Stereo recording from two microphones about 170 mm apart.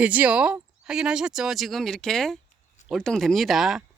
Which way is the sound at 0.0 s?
10° right (ahead or behind).